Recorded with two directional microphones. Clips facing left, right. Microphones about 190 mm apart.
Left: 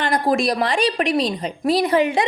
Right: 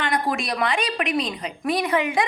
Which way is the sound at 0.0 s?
35° left (ahead or behind).